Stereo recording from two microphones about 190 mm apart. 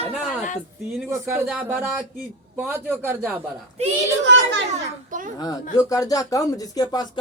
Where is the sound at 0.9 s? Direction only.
10° right (ahead or behind).